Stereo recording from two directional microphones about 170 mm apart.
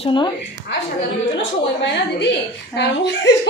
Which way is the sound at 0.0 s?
30° left (ahead or behind).